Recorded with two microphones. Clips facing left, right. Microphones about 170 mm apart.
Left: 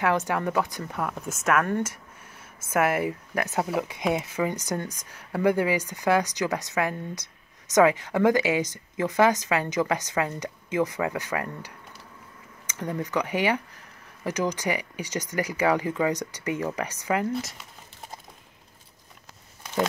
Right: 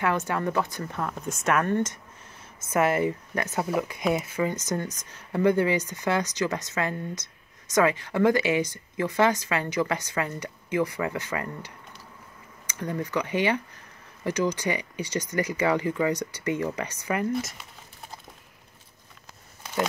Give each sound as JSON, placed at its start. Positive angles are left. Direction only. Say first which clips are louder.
{"t": 0.0, "sound": "speech", "louder": "left 1 dB", "side_deg": 15}